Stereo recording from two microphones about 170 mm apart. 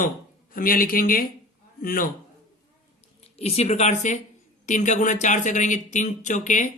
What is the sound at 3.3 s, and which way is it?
A man's voice, 40° left (ahead or behind).